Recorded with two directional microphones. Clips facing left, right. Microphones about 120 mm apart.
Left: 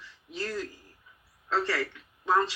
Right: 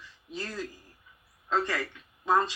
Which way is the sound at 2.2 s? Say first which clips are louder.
Even; 20° right (ahead or behind).